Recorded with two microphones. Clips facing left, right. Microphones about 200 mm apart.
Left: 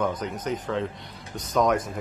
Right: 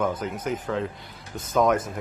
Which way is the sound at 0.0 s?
5° right (ahead or behind).